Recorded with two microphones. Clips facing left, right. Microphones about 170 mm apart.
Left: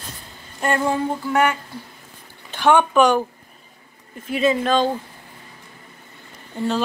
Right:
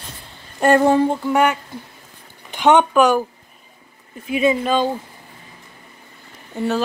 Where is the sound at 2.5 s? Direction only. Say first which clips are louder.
Right 2 dB; 20° right (ahead or behind).